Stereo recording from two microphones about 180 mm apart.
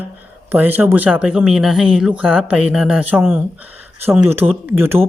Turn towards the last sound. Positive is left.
turn(degrees=-10)  # may be behind; listen again after turning